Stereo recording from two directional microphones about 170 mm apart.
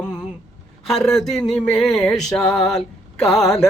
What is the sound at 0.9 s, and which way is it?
Speech, centre (ahead or behind).